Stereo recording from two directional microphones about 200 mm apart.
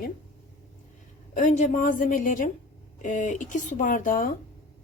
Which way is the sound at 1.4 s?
35° left (ahead or behind).